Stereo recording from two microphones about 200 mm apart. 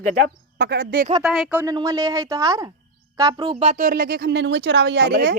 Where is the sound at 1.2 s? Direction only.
Centre (ahead or behind).